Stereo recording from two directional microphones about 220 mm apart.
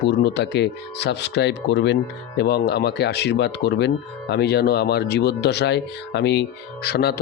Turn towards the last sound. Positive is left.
turn(degrees=45)  # may be behind; listen again after turning